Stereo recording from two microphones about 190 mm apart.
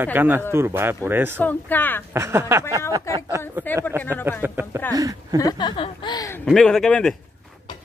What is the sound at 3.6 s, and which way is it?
Speech, 10° right (ahead or behind).